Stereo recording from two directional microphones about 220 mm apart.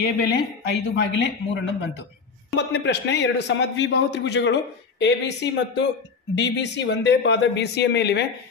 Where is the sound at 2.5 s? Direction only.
50° left (ahead or behind).